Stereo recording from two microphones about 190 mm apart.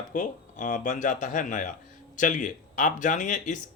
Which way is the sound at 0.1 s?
45° left (ahead or behind).